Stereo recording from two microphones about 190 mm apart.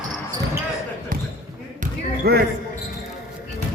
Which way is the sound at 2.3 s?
55° right (ahead or behind).